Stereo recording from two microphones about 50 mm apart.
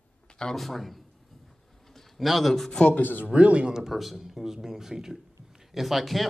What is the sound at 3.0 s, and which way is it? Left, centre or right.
Speech, left.